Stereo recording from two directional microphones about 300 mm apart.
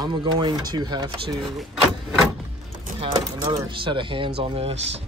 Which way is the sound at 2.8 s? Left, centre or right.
Centre.